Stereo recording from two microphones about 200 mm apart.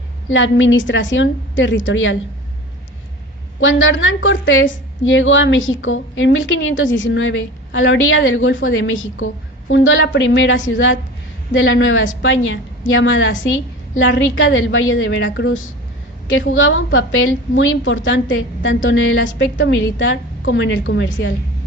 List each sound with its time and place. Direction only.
0.3 s a woman's voice: 70° left (ahead or behind)
3.6 s a woman's voice: 75° left (ahead or behind)